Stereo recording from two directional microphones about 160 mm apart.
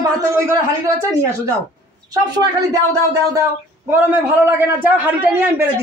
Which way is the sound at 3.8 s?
10° right (ahead or behind).